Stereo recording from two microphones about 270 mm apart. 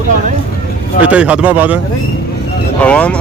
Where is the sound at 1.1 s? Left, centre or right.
Centre.